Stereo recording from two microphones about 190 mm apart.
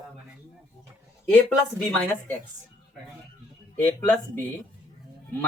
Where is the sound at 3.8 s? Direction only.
10° left (ahead or behind).